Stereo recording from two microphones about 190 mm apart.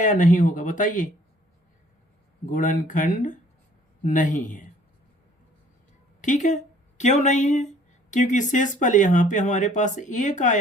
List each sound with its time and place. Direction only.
0.0 s speech: 45° left (ahead or behind)
2.5 s speech: 45° left (ahead or behind)
6.2 s speech: 40° left (ahead or behind)